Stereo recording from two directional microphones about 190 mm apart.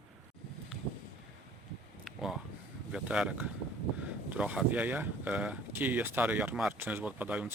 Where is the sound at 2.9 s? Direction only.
5° right (ahead or behind).